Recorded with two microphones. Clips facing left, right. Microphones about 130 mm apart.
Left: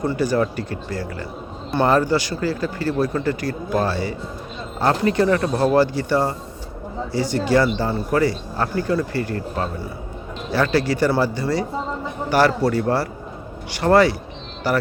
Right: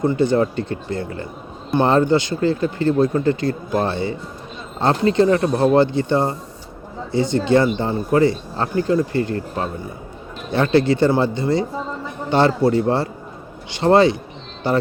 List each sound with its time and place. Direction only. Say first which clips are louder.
0.0 s speech: right 3 dB; 25° right (ahead or behind)